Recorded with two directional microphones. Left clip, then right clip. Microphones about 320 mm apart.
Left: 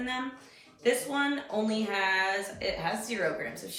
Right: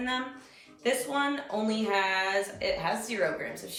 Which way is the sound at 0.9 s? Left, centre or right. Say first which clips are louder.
Even; centre.